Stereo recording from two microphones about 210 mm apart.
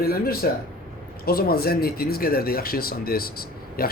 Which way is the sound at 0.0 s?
45° left (ahead or behind).